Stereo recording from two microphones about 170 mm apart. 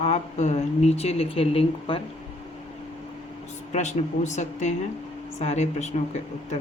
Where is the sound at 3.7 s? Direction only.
45° left (ahead or behind).